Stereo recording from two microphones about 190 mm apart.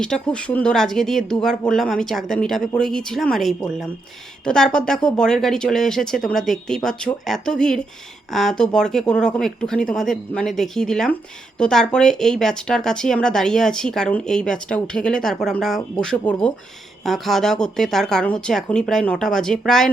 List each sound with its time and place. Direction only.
0.0 s speech: 5° left (ahead or behind)